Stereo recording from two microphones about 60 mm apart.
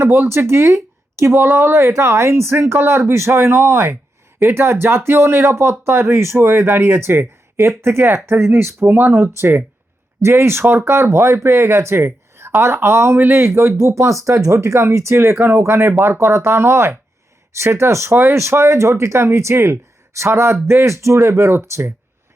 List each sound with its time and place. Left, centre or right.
0.0 s speech: right
8.9 s speech: right
9.1 s speech: right
15.2 s speech: right